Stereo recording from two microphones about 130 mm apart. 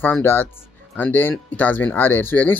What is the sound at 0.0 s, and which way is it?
Speech, 15° left (ahead or behind).